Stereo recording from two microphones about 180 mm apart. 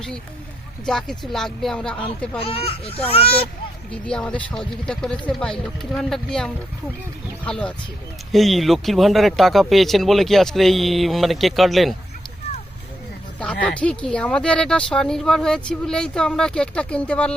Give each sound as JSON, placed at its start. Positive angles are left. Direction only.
{"t": 0.9, "sound": "speech", "side_deg": 5}
{"t": 2.4, "sound": "speech", "side_deg": 30}
{"t": 4.0, "sound": "speech", "side_deg": 5}
{"t": 13.7, "sound": "speech", "side_deg": 5}